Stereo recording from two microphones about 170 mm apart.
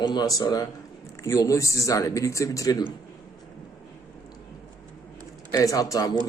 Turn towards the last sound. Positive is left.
turn(degrees=20)  # may be behind; listen again after turning